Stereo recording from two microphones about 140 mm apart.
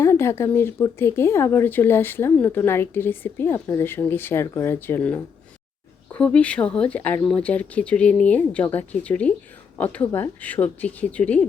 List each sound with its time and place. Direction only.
0.0 s speech: 20° left (ahead or behind)